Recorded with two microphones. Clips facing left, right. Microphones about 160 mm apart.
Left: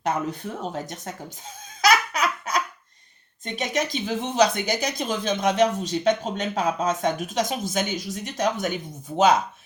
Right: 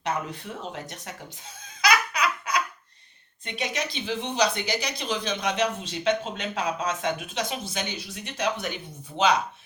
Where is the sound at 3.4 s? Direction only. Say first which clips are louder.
Left 4 dB; 45° left (ahead or behind).